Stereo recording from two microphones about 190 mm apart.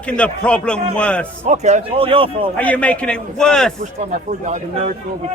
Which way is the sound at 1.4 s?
35° right (ahead or behind).